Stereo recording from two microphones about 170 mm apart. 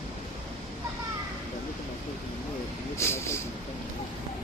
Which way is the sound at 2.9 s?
15° left (ahead or behind).